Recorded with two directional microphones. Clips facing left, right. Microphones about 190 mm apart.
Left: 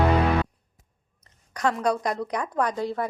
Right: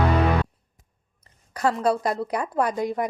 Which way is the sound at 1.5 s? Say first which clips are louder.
Right 2 dB; 5° right (ahead or behind).